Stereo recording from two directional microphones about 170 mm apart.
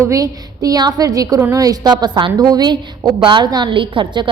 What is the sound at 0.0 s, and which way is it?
A woman's voice, 20° right (ahead or behind).